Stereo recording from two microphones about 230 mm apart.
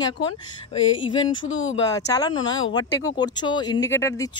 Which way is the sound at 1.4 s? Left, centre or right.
Left.